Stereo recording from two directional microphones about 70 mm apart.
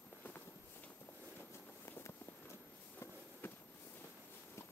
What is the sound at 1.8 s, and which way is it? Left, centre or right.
Walk, left.